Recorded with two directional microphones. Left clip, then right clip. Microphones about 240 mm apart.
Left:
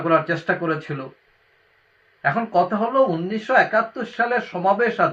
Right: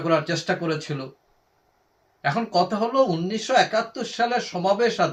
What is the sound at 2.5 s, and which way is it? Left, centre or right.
Speech, centre.